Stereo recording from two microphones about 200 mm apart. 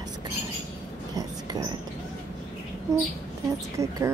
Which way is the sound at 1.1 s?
20° right (ahead or behind).